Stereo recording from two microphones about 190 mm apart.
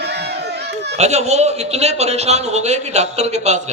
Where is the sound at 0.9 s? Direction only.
35° right (ahead or behind).